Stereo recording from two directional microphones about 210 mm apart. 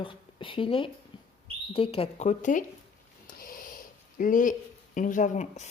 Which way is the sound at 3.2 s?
40° left (ahead or behind).